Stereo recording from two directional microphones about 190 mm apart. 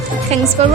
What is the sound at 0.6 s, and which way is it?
Speech, 35° right (ahead or behind).